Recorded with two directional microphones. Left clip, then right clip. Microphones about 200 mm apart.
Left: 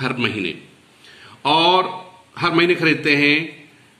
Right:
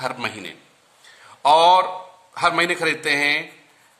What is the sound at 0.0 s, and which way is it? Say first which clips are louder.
A man's voice: left 5 dB; 55° right (ahead or behind).